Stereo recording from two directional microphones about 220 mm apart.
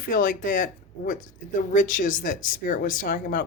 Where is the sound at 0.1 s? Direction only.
40° left (ahead or behind).